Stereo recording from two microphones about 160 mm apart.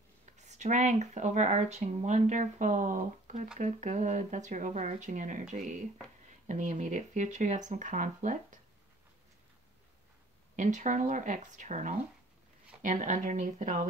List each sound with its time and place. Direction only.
0.4 s speech: 45° right (ahead or behind)
6.4 s speech: 50° right (ahead or behind)
10.5 s speech: 50° right (ahead or behind)